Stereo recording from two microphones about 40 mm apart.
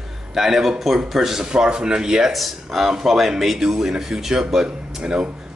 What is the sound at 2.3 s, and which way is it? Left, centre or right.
Speech, centre.